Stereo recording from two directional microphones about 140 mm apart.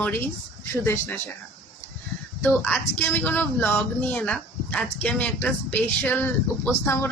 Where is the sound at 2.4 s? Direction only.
10° left (ahead or behind).